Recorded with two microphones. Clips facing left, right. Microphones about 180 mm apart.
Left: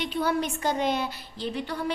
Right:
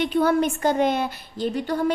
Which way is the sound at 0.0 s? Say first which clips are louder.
Right 7 dB; 55° right (ahead or behind).